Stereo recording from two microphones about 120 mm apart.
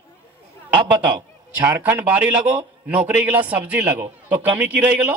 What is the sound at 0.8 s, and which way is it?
Speech, 40° right (ahead or behind).